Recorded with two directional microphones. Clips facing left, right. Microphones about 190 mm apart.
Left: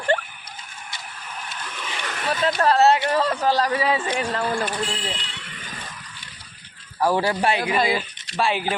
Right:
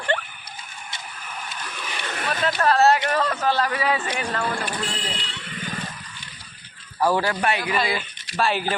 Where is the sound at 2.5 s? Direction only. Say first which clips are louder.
Even; 25° left (ahead or behind).